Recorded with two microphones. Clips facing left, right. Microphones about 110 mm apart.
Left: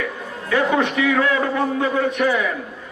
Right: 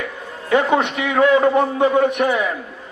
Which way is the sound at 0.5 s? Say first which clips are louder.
Right 2 dB; 25° right (ahead or behind).